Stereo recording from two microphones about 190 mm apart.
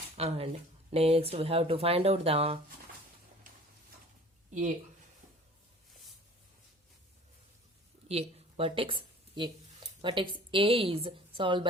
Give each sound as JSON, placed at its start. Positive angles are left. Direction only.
{"t": 0.2, "sound": "speech", "side_deg": -30}
{"t": 8.0, "sound": "a woman's voice", "side_deg": -35}